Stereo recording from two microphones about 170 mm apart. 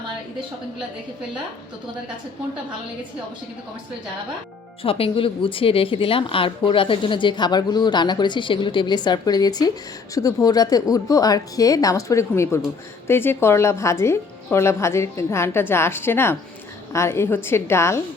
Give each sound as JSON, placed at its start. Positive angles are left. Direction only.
{"t": 4.8, "sound": "a woman's voice", "side_deg": 35}